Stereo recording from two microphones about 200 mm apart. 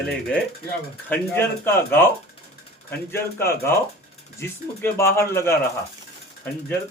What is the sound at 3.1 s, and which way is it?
Speech, 10° left (ahead or behind).